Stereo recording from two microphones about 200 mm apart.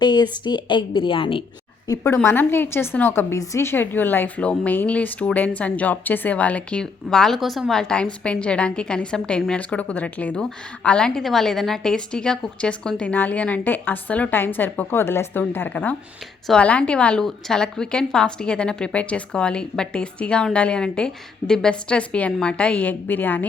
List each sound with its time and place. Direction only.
0.0 s a woman's voice: 20° left (ahead or behind)
1.9 s a woman's voice: 15° left (ahead or behind)